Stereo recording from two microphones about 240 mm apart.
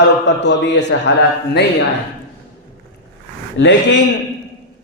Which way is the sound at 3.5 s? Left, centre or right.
Left.